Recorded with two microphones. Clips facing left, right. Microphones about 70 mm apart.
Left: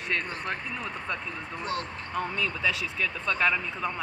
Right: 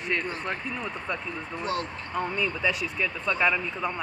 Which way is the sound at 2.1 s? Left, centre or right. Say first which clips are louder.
Right 2 dB; right.